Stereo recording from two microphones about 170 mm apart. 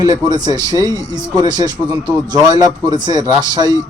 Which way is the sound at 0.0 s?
20° right (ahead or behind).